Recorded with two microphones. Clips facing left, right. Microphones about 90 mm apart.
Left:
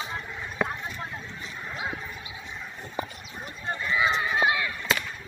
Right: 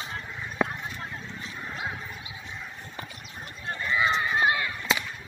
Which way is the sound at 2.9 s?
15° left (ahead or behind).